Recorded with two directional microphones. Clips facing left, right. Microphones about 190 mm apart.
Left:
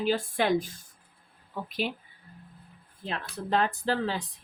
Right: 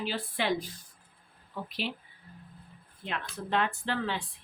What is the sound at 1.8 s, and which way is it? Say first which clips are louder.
Speech: left 2 dB; 50° left (ahead or behind).